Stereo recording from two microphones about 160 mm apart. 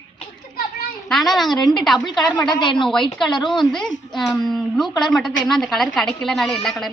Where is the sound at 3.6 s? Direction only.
5° left (ahead or behind).